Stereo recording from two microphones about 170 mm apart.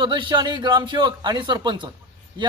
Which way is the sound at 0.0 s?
30° right (ahead or behind).